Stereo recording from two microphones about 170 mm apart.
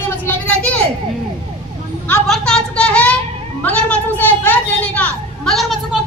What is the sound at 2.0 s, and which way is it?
Speech, centre (ahead or behind).